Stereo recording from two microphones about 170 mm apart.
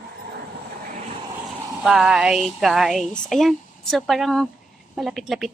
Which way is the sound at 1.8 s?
Centre (ahead or behind).